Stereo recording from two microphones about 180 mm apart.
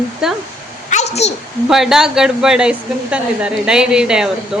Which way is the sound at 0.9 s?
40° left (ahead or behind).